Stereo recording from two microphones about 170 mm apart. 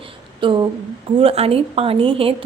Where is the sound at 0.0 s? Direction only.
30° right (ahead or behind).